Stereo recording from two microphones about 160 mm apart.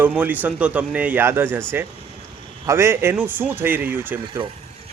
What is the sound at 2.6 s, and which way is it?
A man's voice, 15° right (ahead or behind).